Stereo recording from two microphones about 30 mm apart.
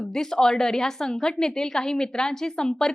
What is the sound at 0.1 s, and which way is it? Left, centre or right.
A woman's voice, centre.